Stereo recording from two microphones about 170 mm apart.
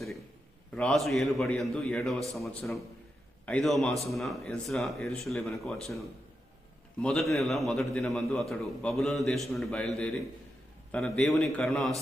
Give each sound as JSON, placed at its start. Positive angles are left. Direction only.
{"t": 0.7, "sound": "a man's voice", "side_deg": 5}
{"t": 7.0, "sound": "a man's voice", "side_deg": 0}